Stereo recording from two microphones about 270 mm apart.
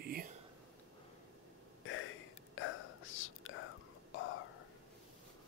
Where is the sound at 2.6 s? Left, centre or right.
Left.